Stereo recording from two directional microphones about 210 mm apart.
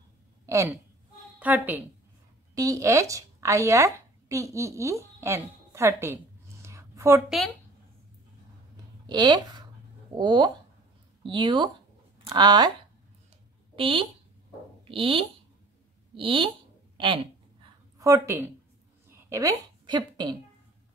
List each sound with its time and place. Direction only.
0.5 s a woman's voice: 15° right (ahead or behind)
6.6 s a sound: 15° right (ahead or behind)
7.2 s speech: centre (ahead or behind)
9.0 s speech: 20° right (ahead or behind)
13.7 s speech: 25° right (ahead or behind)
16.2 s a sound: 25° right (ahead or behind)
17.9 s a woman's voice: 15° right (ahead or behind)